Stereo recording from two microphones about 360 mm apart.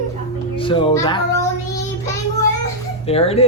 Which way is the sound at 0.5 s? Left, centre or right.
Centre.